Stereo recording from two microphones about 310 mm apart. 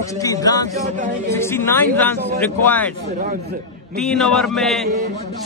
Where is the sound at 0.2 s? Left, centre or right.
Centre.